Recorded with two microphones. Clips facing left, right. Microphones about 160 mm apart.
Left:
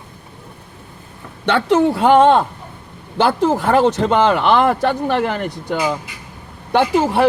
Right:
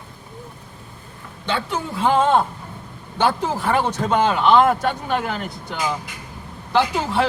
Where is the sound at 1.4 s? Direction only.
70° left (ahead or behind).